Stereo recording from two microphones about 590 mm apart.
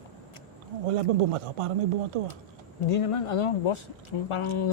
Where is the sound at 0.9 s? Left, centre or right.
Right.